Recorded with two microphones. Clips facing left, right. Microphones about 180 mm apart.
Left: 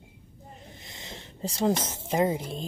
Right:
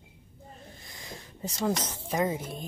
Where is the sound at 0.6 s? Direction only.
20° left (ahead or behind).